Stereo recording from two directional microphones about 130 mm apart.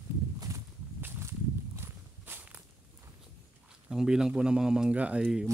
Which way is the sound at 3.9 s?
5° right (ahead or behind).